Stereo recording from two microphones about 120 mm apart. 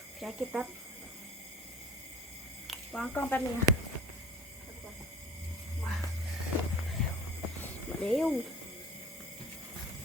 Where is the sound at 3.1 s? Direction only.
15° left (ahead or behind).